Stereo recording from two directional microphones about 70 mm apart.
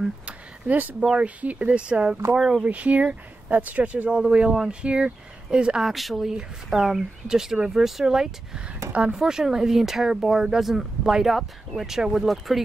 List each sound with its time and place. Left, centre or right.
0.7 s speech: right; by 2.6 s centre
2.6 s speech: right
5.9 s speech: centre